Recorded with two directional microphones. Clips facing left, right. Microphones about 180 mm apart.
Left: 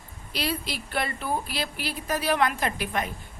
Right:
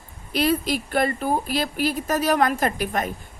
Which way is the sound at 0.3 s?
50° right (ahead or behind).